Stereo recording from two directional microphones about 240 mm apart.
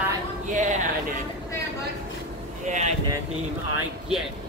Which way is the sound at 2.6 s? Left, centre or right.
Right.